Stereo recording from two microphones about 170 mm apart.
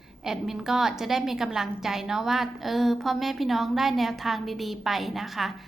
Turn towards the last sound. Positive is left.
turn(degrees=0)  # may be behind; listen again after turning